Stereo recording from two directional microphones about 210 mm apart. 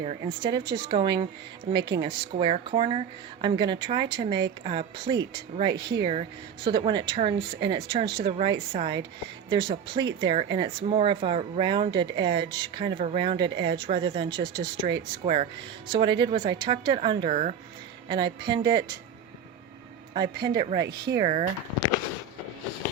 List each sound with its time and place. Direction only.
0.0 s speech: 30° right (ahead or behind)
20.1 s speech: 20° right (ahead or behind)